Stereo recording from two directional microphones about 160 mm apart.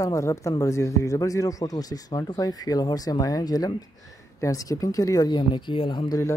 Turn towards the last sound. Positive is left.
turn(degrees=30)  # may be behind; listen again after turning